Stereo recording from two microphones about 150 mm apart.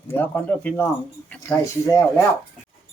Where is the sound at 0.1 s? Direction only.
10° left (ahead or behind).